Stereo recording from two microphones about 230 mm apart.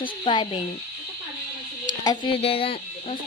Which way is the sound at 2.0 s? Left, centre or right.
Left.